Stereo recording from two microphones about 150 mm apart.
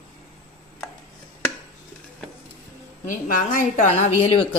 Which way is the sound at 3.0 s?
60° left (ahead or behind).